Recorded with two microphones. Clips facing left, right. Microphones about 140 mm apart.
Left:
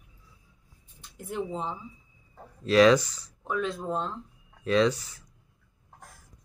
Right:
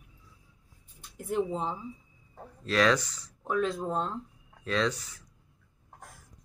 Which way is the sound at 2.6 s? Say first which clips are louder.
Left 6 dB; 10° left (ahead or behind).